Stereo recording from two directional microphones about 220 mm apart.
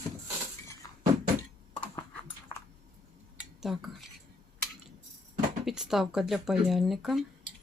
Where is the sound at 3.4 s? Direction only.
Centre (ahead or behind).